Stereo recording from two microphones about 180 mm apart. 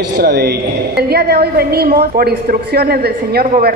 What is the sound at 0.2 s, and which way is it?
A woman's voice, 60° right (ahead or behind).